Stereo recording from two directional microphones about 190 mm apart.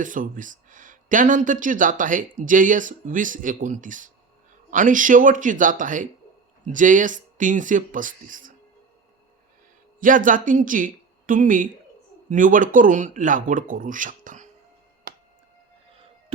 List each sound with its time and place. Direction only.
0.0 s speech: 45° right (ahead or behind)
10.0 s speech: 45° right (ahead or behind)